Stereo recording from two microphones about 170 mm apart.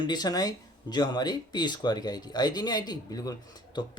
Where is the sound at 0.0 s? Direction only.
25° left (ahead or behind).